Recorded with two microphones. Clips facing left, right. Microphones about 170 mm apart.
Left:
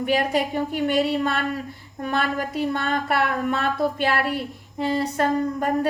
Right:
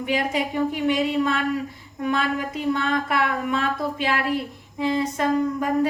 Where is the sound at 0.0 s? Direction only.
50° left (ahead or behind).